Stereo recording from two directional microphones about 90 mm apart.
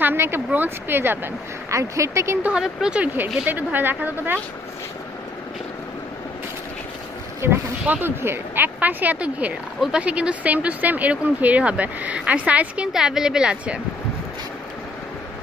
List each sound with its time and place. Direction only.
0.0 s speech: 25° right (ahead or behind)
1.8 s speech: 35° right (ahead or behind)
2.4 s speech: 10° right (ahead or behind)
7.4 s speech: 25° right (ahead or behind); by 13.7 s 10° right (ahead or behind)